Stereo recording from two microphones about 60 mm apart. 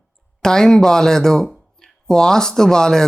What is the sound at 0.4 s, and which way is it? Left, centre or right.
Speech, centre.